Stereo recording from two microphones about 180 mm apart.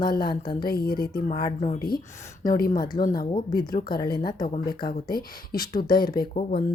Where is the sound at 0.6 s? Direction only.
60° left (ahead or behind).